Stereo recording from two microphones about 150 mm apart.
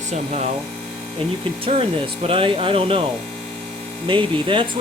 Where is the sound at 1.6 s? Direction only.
40° right (ahead or behind).